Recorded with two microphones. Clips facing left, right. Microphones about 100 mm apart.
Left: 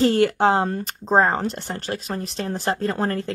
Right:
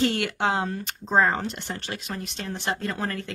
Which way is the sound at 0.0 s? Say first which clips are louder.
Left 7 dB; 40° left (ahead or behind).